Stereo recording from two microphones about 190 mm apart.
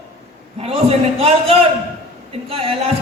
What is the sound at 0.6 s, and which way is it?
Speech, 30° right (ahead or behind).